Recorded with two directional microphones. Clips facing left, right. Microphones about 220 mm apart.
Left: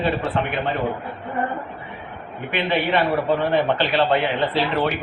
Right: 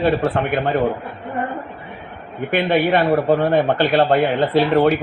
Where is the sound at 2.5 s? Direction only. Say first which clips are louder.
Right 5 dB; 50° right (ahead or behind).